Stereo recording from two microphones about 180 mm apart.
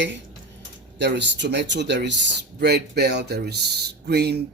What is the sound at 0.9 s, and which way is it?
Speech, 75° right (ahead or behind).